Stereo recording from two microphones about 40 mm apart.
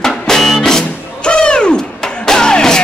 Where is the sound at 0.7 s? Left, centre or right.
Centre.